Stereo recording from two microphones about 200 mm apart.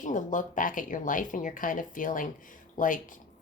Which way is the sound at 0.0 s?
40° left (ahead or behind).